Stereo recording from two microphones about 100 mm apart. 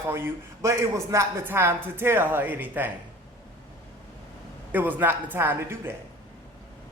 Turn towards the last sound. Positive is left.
turn(degrees=-25)  # may be behind; listen again after turning